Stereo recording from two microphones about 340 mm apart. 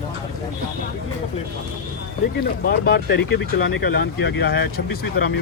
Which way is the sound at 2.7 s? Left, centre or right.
Left.